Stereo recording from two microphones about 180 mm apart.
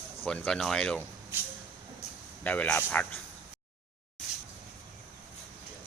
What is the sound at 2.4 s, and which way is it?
Speech, 10° left (ahead or behind).